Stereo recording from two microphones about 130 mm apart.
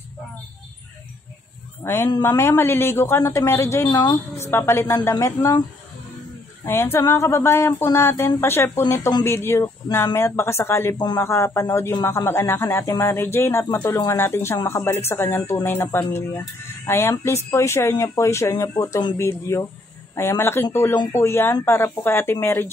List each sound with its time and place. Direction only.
2.2 s speech: 20° left (ahead or behind)
6.6 s speech: 15° left (ahead or behind)